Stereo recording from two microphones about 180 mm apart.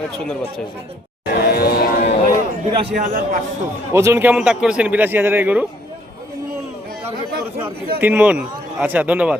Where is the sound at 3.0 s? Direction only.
50° right (ahead or behind).